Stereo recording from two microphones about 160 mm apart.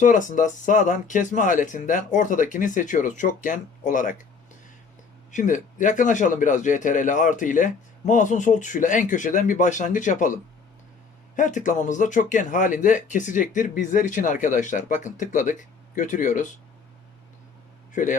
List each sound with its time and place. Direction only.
0.0 s speech: 55° left (ahead or behind)
5.3 s speech: 55° left (ahead or behind)
11.3 s speech: 50° left (ahead or behind)
17.9 s a man's voice: 55° left (ahead or behind)